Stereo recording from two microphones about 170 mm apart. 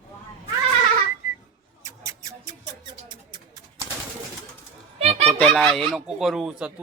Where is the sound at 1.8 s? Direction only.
20° right (ahead or behind).